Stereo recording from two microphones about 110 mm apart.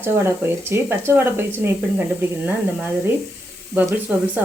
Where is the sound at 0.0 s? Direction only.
20° right (ahead or behind).